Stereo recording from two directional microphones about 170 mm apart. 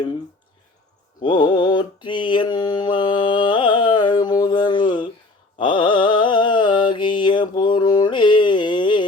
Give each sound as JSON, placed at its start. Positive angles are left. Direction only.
{"t": 1.2, "sound": "mantra", "side_deg": 25}